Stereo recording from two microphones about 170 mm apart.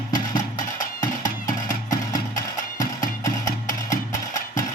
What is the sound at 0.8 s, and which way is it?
Music, 50° left (ahead or behind).